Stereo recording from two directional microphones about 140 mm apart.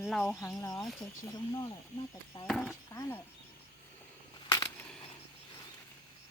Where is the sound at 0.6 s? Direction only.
25° left (ahead or behind).